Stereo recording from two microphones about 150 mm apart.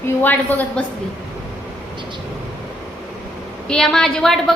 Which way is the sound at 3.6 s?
5° left (ahead or behind).